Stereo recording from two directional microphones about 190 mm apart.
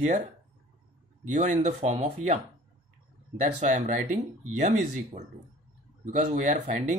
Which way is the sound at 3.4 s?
40° right (ahead or behind).